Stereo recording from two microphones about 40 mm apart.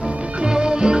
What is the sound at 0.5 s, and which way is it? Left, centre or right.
Music, right.